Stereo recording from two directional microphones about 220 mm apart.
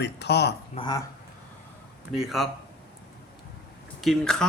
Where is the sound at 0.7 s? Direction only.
20° left (ahead or behind).